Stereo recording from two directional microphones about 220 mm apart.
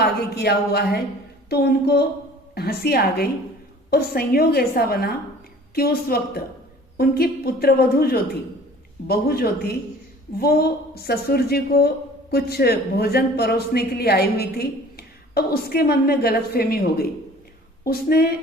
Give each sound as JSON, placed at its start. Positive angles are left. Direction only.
{"t": 0.0, "sound": "a man's voice", "side_deg": 45}